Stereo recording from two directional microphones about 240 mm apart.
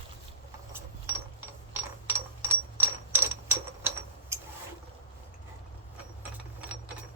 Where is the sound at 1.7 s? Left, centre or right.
Centre.